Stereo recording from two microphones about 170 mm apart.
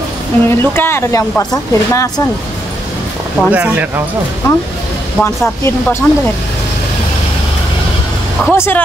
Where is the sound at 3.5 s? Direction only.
10° right (ahead or behind).